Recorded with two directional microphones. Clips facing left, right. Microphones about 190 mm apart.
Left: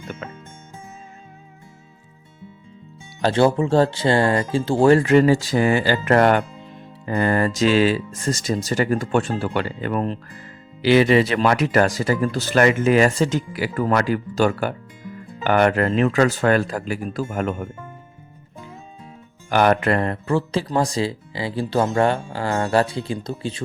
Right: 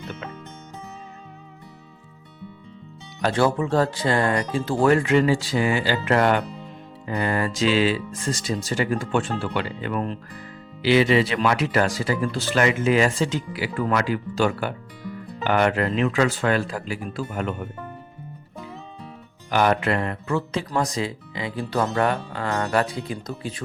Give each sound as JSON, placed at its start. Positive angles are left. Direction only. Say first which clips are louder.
{"t": 3.2, "sound": "speech", "louder": "left 4 dB", "side_deg": 25}
{"t": 10.8, "sound": "speech", "louder": "left 3 dB", "side_deg": 50}
{"t": 19.5, "sound": "speech", "louder": "left 3 dB", "side_deg": 50}